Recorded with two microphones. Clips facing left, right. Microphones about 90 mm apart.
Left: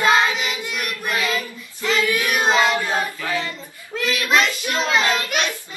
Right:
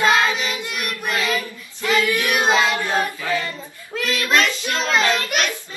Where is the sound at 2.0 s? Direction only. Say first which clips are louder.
Right 1 dB; 15° left (ahead or behind).